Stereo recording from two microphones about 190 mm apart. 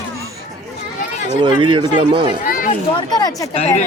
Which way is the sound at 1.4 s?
25° right (ahead or behind).